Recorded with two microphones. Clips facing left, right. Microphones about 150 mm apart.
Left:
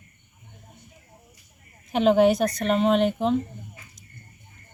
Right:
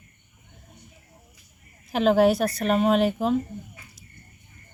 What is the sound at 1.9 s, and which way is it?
Speech, centre (ahead or behind).